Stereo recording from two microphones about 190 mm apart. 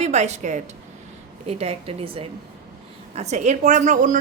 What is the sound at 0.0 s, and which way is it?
A woman's voice, 35° right (ahead or behind).